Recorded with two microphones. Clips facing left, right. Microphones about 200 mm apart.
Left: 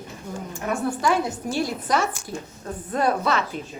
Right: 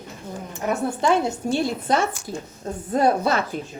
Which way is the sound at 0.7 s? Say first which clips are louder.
Right 2 dB; 25° right (ahead or behind).